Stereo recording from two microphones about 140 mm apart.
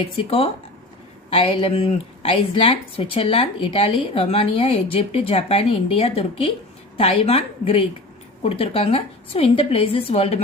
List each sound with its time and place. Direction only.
0.0 s speech: 45° left (ahead or behind)